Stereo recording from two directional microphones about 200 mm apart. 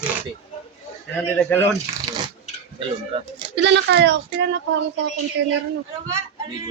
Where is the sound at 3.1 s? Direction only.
30° right (ahead or behind).